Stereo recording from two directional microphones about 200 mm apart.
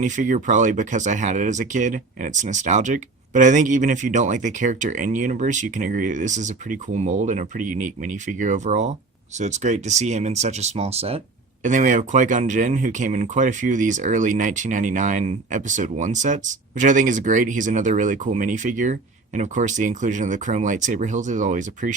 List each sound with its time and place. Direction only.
0.0 s speech: 40° right (ahead or behind)